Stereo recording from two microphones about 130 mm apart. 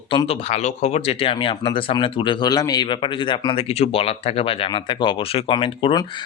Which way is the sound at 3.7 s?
50° left (ahead or behind).